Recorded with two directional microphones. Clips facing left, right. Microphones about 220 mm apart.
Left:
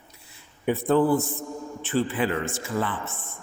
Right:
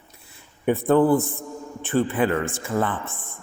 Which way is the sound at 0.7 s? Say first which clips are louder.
Right 3 dB; 55° right (ahead or behind).